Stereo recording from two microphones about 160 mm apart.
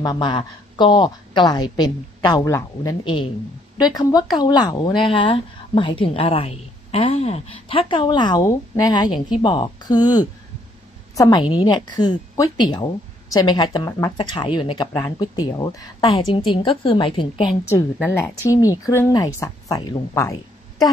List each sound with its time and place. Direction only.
0.0 s a woman's voice: 30° left (ahead or behind)
18.0 s a woman's voice: 15° left (ahead or behind)